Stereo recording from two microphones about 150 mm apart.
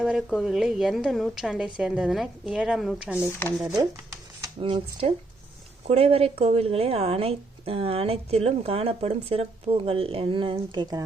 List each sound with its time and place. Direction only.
0.0 s a woman's voice: 5° right (ahead or behind)
3.6 s speech: 25° right (ahead or behind)
4.6 s a woman's voice: 40° right (ahead or behind)